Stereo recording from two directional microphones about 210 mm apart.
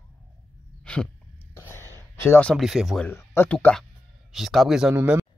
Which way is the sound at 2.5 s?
Centre (ahead or behind).